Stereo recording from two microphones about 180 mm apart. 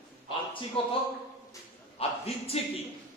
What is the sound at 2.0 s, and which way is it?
Speech, 35° left (ahead or behind).